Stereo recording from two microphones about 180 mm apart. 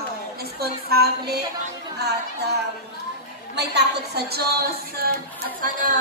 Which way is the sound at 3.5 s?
70° right (ahead or behind).